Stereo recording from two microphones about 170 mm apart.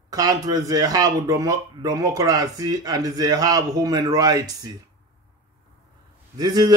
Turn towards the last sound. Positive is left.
turn(degrees=-25)  # may be behind; listen again after turning